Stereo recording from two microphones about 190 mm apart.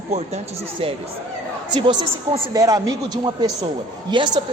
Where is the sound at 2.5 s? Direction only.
20° right (ahead or behind).